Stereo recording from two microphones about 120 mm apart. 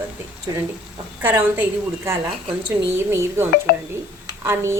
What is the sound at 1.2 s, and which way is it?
A woman's voice, 20° right (ahead or behind).